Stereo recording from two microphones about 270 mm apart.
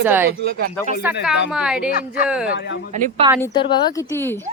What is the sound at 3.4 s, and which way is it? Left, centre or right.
Speech, centre.